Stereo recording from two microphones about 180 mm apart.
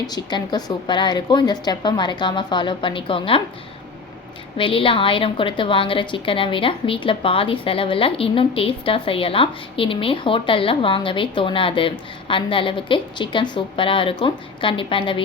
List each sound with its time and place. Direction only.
0.1 s a woman's voice: 25° left (ahead or behind)
4.5 s a woman's voice: 30° left (ahead or behind)